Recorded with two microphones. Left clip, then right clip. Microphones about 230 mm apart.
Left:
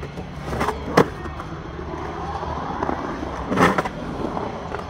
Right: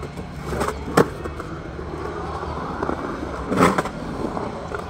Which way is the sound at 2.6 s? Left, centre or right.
Centre.